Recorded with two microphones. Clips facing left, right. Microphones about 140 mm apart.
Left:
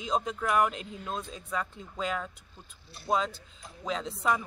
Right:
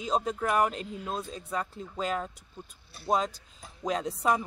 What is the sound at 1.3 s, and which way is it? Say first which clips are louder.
Speech: right 1 dB; 35° right (ahead or behind).